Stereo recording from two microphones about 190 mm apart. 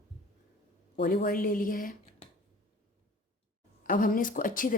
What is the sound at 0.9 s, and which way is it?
Speech, 55° left (ahead or behind).